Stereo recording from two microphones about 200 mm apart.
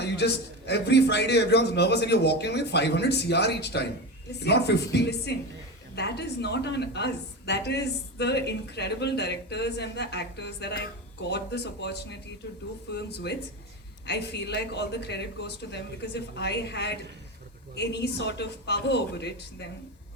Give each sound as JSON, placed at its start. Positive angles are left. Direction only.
{"t": 0.0, "sound": "a man's voice", "side_deg": 55}